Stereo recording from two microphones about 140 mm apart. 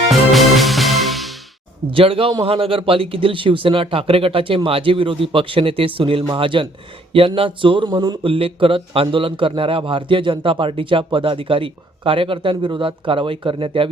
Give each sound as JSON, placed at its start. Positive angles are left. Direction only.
{"t": 0.1, "sound": "music", "side_deg": 0}
{"t": 1.9, "sound": "speech", "side_deg": -40}